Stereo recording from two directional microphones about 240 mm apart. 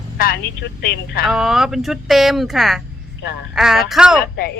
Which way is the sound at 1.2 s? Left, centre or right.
Centre.